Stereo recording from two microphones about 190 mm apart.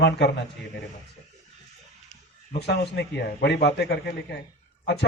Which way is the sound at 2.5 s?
60° left (ahead or behind).